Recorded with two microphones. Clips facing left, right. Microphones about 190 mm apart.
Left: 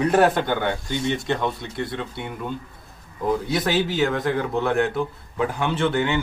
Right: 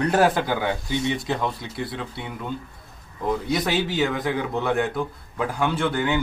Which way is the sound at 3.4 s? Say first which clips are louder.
Left 1 dB; centre (ahead or behind).